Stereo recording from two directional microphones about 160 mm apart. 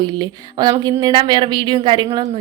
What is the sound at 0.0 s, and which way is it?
Speech, 25° right (ahead or behind).